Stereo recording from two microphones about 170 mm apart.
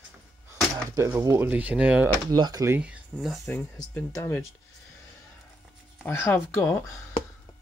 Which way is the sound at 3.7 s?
20° left (ahead or behind).